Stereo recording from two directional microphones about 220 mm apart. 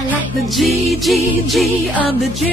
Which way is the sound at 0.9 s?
Centre (ahead or behind).